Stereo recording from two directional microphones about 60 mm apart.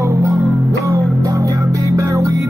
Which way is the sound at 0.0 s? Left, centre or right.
Right.